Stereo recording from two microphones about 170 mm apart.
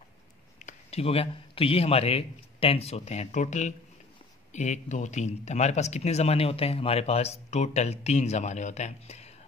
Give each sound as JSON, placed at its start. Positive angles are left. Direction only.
{"t": 0.6, "sound": "a man's voice", "side_deg": 40}